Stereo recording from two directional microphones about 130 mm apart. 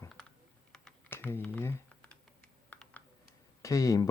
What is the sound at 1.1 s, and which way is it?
Typing, 15° left (ahead or behind).